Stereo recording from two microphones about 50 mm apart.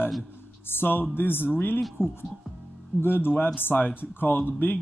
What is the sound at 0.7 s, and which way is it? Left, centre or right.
Speech, left.